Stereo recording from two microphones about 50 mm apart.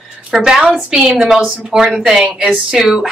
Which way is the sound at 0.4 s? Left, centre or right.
Centre.